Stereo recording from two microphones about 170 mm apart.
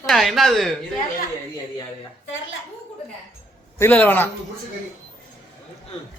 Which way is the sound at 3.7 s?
10° left (ahead or behind).